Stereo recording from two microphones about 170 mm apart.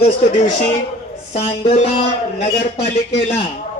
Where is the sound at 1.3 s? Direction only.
35° left (ahead or behind).